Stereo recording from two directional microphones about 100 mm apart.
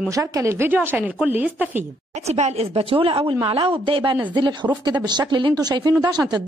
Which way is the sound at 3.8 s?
55° right (ahead or behind).